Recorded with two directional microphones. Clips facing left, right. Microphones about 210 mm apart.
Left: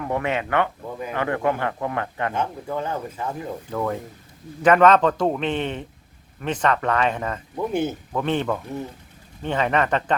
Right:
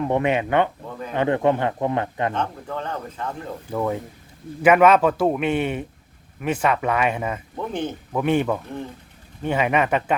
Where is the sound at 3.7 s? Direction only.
10° right (ahead or behind).